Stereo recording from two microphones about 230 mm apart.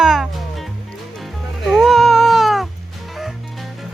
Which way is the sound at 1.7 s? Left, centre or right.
Centre.